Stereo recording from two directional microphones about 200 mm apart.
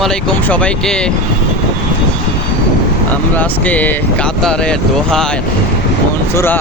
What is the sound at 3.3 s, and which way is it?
Speech, 10° left (ahead or behind).